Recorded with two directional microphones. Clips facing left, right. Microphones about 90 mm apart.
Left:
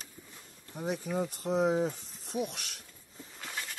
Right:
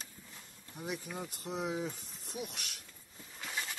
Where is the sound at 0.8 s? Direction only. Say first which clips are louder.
Left 8 dB; 40° left (ahead or behind).